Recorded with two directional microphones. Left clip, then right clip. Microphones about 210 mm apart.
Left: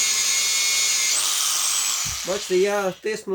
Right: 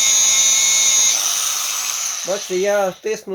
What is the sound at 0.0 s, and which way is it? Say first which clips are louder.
Tools: right 6 dB; centre (ahead or behind).